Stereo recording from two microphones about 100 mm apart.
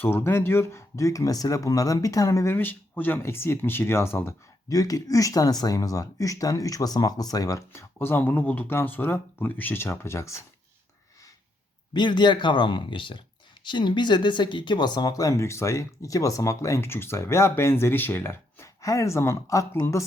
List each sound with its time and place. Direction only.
0.0 s speech: 20° left (ahead or behind)
2.6 s speech: 20° left (ahead or behind)
4.7 s speech: 35° left (ahead or behind)
11.9 s speech: 50° left (ahead or behind); by 20.1 s 30° left (ahead or behind)